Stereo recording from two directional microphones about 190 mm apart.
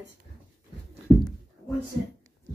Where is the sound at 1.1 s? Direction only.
Centre (ahead or behind).